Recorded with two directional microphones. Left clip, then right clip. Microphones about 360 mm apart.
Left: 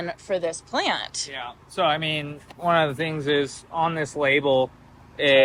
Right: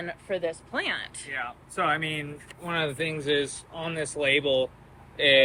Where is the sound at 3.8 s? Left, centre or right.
Left.